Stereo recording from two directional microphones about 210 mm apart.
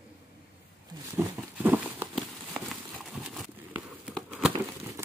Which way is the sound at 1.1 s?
10° right (ahead or behind).